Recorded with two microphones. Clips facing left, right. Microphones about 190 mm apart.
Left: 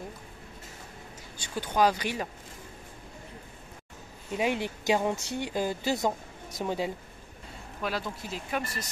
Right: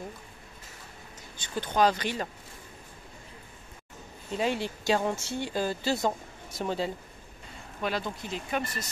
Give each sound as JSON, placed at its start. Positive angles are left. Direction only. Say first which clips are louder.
{"t": 1.4, "sound": "speech", "louder": "even", "side_deg": 10}
{"t": 4.3, "sound": "speech", "louder": "even", "side_deg": 15}